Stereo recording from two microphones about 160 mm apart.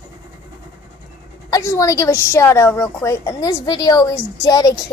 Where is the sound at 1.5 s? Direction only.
20° left (ahead or behind).